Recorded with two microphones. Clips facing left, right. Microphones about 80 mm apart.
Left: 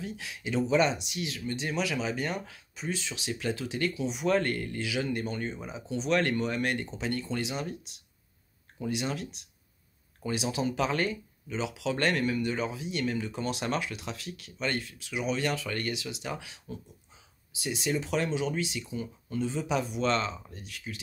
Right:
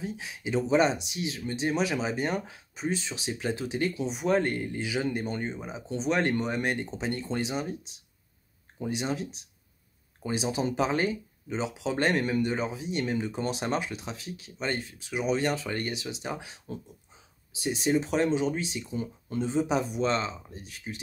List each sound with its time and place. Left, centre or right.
0.0 s speech: right
8.8 s speech: right
17.6 s speech: right
20.5 s speech: right